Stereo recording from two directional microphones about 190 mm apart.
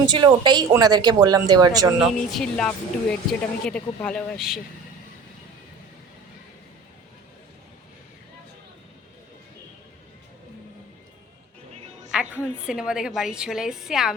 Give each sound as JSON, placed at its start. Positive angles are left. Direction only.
{"t": 0.1, "sound": "speech", "side_deg": -25}
{"t": 2.0, "sound": "a woman's voice", "side_deg": 0}
{"t": 12.1, "sound": "a woman's voice", "side_deg": -5}